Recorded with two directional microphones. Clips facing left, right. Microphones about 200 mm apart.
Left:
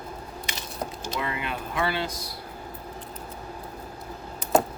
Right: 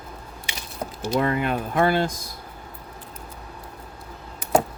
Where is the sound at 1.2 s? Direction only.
50° right (ahead or behind).